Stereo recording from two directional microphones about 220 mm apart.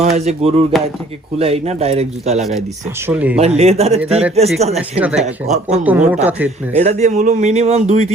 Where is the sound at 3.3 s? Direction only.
30° right (ahead or behind).